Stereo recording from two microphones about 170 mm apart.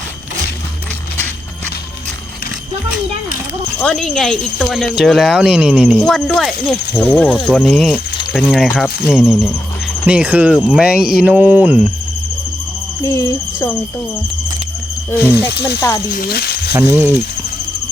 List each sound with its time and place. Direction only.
3.8 s speech: 5° left (ahead or behind)
13.0 s speech: 15° left (ahead or behind)
15.2 s speech: 10° right (ahead or behind)
15.5 s speech: 75° left (ahead or behind)
16.1 s speech: 65° left (ahead or behind)
16.7 s speech: 10° right (ahead or behind)